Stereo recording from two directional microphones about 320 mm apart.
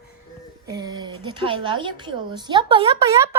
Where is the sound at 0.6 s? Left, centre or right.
Centre.